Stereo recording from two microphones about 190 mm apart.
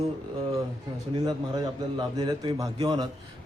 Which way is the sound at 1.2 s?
20° right (ahead or behind).